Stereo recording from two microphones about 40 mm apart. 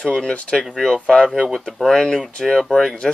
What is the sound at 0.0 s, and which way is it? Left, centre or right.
Speech, centre.